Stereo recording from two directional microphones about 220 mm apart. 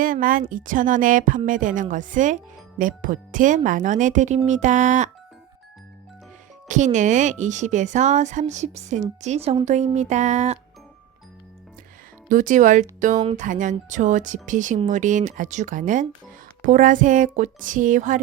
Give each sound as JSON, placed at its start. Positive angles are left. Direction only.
{"t": 0.0, "sound": "a woman's voice", "side_deg": -40}
{"t": 6.7, "sound": "a woman's voice", "side_deg": -35}
{"t": 12.3, "sound": "a woman's voice", "side_deg": -35}